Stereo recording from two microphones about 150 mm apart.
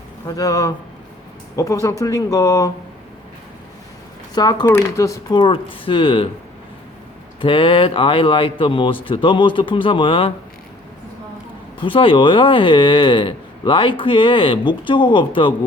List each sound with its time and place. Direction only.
0.3 s speech: 25° left (ahead or behind)
4.4 s speech: 30° left (ahead or behind)
5.4 s speech: 35° left (ahead or behind)
7.4 s speech: 35° left (ahead or behind)
11.8 s speech: 35° left (ahead or behind)